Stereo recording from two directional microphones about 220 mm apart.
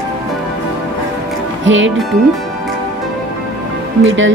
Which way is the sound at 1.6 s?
60° right (ahead or behind).